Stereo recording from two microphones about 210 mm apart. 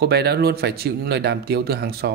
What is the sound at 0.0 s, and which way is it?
A man's voice, 50° right (ahead or behind).